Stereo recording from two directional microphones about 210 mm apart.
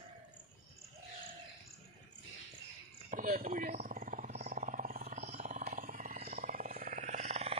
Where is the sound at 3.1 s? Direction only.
40° right (ahead or behind).